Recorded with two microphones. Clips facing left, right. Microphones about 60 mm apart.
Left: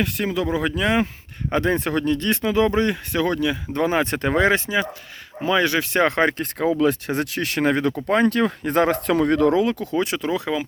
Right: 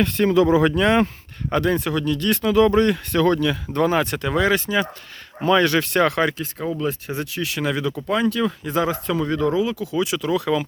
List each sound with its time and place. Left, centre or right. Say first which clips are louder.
0.0 s speech: right 6 dB; centre
1.5 s speech: even; left
5.4 s speech: right 2 dB; centre; by 6.3 s left
6.3 s speech: left 4 dB; left
6.7 s speech: left 6 dB; left